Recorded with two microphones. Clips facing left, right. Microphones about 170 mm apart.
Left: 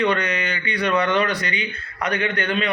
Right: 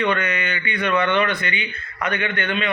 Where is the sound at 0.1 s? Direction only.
35° left (ahead or behind).